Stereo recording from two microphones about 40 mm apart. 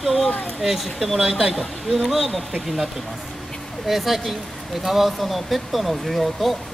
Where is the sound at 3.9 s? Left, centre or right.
Centre.